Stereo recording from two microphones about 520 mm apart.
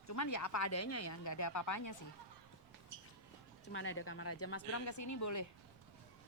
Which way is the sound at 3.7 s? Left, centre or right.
Left.